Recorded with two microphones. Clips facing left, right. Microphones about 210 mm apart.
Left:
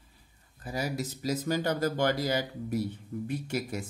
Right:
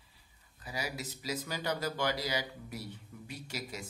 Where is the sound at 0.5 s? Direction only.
50° left (ahead or behind).